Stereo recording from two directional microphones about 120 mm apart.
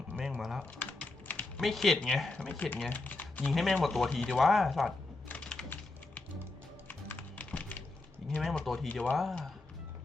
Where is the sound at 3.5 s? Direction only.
Centre (ahead or behind).